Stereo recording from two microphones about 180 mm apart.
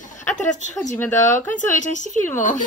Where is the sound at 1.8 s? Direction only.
45° left (ahead or behind).